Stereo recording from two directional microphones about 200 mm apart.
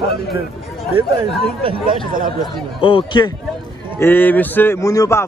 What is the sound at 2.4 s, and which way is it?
Speech, 25° left (ahead or behind).